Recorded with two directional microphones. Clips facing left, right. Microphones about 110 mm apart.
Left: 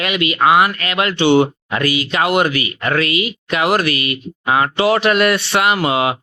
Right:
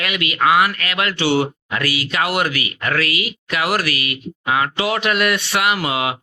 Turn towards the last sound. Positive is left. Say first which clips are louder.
# left 4 dB
turn(degrees=30)  # may be behind; listen again after turning